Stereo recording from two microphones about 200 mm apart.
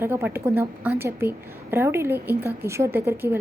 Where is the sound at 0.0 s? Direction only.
10° right (ahead or behind).